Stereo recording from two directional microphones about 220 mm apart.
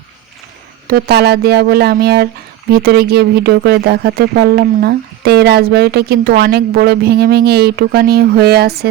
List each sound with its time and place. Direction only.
0.9 s speech: 45° right (ahead or behind)